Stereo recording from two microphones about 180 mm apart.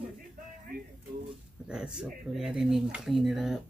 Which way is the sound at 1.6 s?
5° right (ahead or behind).